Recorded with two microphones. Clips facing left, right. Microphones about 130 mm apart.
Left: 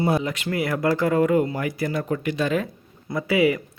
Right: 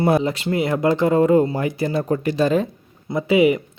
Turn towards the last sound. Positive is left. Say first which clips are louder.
# right 4 dB
turn(degrees=-20)  # may be behind; listen again after turning